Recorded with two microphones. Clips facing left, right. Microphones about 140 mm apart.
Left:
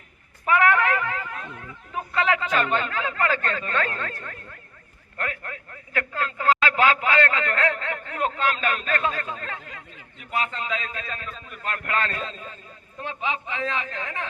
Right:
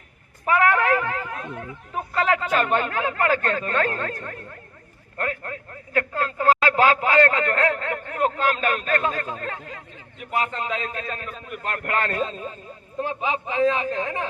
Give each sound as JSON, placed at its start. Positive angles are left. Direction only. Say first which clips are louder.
{"t": 0.4, "sound": "a sound", "louder": "right 1 dB", "side_deg": -40}
{"t": 2.1, "sound": "a man's voice", "louder": "right 2 dB", "side_deg": -45}
{"t": 4.2, "sound": "a man's voice", "louder": "right 4 dB", "side_deg": -25}
{"t": 11.3, "sound": "a man's voice", "louder": "right 4 dB", "side_deg": -10}
{"t": 11.6, "sound": "a man's voice", "louder": "right 1 dB", "side_deg": -45}